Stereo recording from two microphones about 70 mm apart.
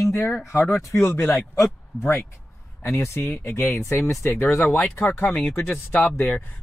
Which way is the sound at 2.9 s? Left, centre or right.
Left.